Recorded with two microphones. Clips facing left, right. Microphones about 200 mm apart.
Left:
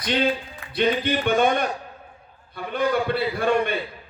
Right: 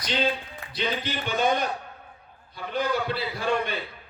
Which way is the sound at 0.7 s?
55° left (ahead or behind).